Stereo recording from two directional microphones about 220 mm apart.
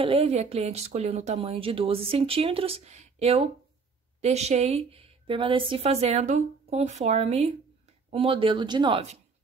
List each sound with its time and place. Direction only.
0.0 s speech: 25° right (ahead or behind)